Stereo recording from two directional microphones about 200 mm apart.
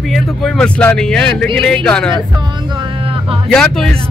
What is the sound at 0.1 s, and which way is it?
Speech, 5° left (ahead or behind).